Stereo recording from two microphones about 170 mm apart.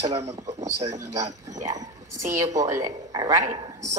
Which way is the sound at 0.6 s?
20° right (ahead or behind).